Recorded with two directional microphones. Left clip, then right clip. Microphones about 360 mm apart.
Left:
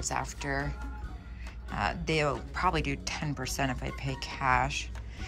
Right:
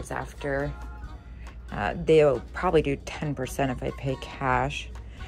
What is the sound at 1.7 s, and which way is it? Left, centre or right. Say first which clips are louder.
Speech: right 8 dB; centre.